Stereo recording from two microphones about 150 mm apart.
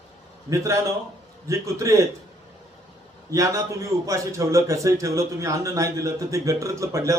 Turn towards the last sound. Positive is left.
turn(degrees=-20)  # may be behind; listen again after turning